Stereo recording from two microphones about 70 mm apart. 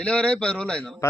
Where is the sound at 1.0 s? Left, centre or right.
Left.